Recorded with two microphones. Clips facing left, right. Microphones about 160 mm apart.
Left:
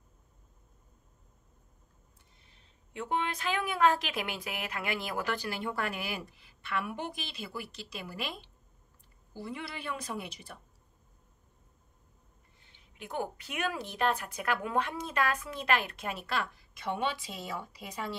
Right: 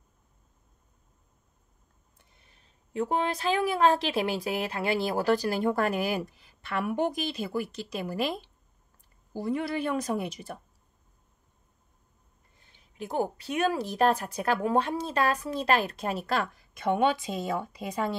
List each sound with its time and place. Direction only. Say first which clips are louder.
2.9 s speech: right 5 dB; 40° right (ahead or behind)
12.6 s speech: right 8 dB; 40° right (ahead or behind)